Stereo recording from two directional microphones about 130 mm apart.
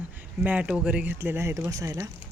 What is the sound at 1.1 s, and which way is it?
Speech, 20° right (ahead or behind).